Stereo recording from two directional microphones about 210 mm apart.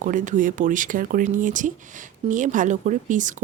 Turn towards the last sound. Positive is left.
turn(degrees=-35)  # may be behind; listen again after turning